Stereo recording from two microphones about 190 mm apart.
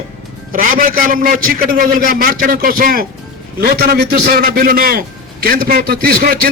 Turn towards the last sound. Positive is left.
turn(degrees=-50)  # may be behind; listen again after turning